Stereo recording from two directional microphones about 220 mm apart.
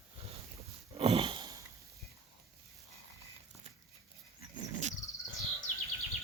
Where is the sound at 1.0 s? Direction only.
25° right (ahead or behind).